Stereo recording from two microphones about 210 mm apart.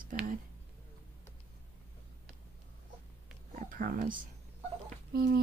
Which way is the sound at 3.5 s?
40° right (ahead or behind).